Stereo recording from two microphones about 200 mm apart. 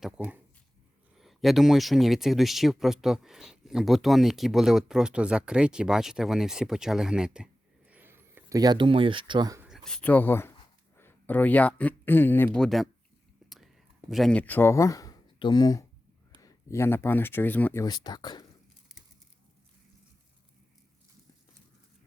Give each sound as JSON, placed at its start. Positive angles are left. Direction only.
{"t": 0.0, "sound": "speech", "side_deg": -5}
{"t": 9.6, "sound": "speech", "side_deg": 0}
{"t": 13.4, "sound": "whispering", "side_deg": 0}
{"t": 14.1, "sound": "speech", "side_deg": 0}